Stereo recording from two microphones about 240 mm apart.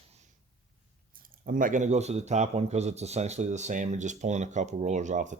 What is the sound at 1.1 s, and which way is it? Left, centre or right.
Speech, right.